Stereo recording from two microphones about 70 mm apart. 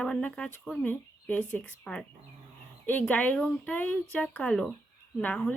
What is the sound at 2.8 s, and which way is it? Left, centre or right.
Speech, left.